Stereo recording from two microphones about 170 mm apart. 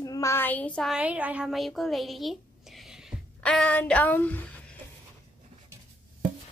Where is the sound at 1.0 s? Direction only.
10° right (ahead or behind); by 4.8 s 10° left (ahead or behind).